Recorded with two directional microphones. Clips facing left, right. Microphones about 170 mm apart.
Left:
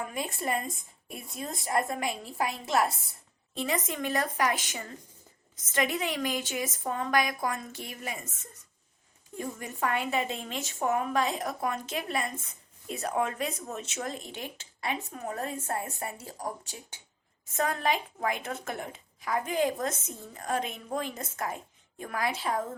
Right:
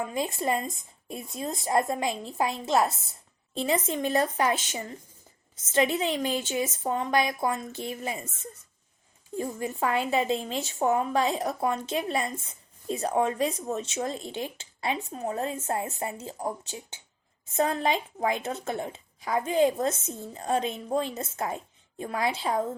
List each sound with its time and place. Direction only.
0.0 s a woman's voice: 25° right (ahead or behind)
9.4 s a woman's voice: 30° right (ahead or behind)